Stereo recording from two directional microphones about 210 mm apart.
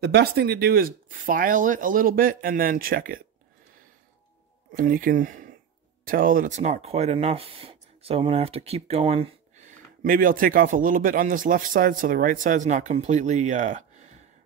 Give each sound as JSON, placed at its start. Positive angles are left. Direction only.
{"t": 0.0, "sound": "speech", "side_deg": -50}
{"t": 4.7, "sound": "speech", "side_deg": -40}